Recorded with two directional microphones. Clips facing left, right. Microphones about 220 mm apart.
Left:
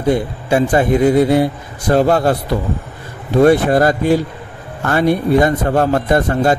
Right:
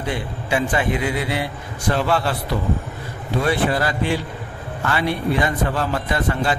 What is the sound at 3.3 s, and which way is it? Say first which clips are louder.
A man's voice: left 10 dB; 45° left (ahead or behind).